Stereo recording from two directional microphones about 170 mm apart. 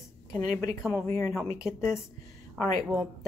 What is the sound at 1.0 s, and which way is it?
Speech, 20° left (ahead or behind).